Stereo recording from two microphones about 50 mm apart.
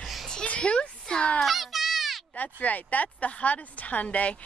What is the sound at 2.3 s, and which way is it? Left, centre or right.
Speech, left.